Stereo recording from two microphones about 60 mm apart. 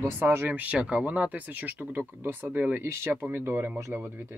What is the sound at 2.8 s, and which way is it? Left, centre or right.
Speech, right.